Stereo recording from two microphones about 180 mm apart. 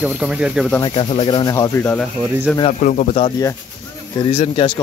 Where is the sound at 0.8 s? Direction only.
30° left (ahead or behind); by 2.6 s 5° left (ahead or behind).